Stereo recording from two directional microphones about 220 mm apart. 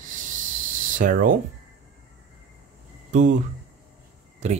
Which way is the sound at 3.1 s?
35° right (ahead or behind).